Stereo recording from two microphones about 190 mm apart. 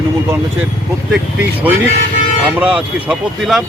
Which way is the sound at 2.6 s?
5° right (ahead or behind).